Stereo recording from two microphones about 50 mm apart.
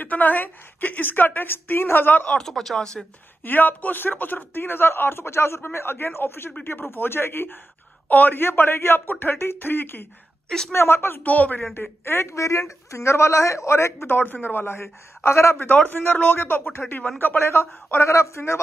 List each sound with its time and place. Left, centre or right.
0.0 s a woman's voice: left
2.3 s speech: centre
3.4 s speech: left
11.2 s a woman's voice: left
12.0 s a man's voice: left
14.0 s speech: left
14.8 s speech: left
15.6 s speech: left
17.9 s a man's voice: left